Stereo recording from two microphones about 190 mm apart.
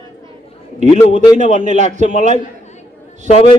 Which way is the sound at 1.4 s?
40° right (ahead or behind).